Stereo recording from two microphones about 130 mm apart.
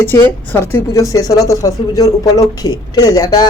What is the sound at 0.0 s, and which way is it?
A woman's voice, 15° left (ahead or behind).